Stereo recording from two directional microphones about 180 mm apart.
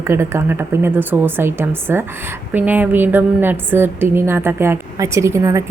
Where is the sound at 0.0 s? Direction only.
15° right (ahead or behind).